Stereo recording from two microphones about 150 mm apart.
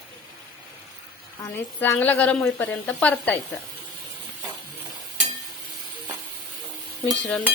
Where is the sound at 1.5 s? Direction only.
15° left (ahead or behind).